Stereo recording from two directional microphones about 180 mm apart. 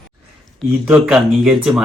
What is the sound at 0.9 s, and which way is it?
Speech, 5° right (ahead or behind).